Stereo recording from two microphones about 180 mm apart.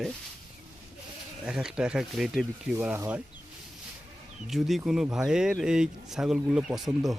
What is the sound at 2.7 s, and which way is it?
Speech, 15° right (ahead or behind).